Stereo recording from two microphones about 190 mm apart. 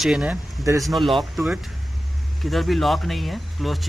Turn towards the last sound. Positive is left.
turn(degrees=0)  # may be behind; listen again after turning